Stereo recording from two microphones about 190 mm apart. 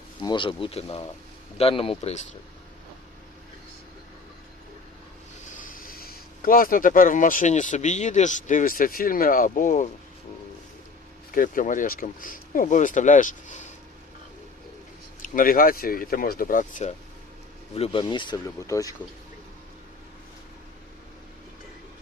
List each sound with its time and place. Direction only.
0.2 s speech: 25° left (ahead or behind)
5.5 s speech: 50° left (ahead or behind)
11.3 s speech: 45° left (ahead or behind)
15.2 s speech: 45° left (ahead or behind)
17.7 s speech: 30° left (ahead or behind)